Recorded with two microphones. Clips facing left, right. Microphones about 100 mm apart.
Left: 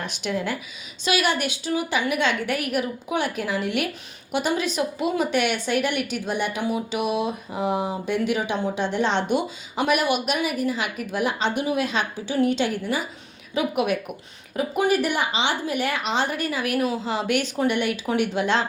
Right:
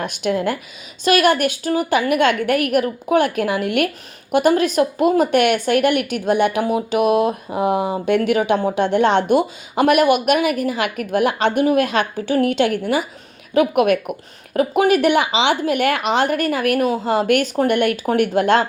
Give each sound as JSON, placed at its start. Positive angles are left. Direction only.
{"t": 0.0, "sound": "a woman's voice", "side_deg": -50}